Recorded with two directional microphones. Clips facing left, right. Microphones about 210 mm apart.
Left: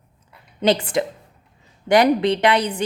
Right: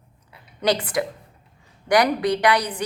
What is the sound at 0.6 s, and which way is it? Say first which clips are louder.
A woman's voice: left 3 dB; 25° left (ahead or behind).